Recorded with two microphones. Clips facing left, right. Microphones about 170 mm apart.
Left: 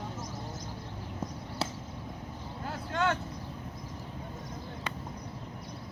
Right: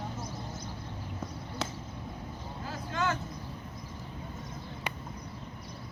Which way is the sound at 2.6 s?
65° left (ahead or behind).